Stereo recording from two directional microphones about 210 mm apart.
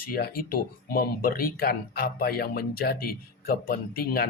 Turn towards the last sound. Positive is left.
turn(degrees=45)  # may be behind; listen again after turning